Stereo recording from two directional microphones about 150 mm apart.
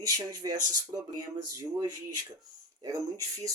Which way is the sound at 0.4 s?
35° right (ahead or behind).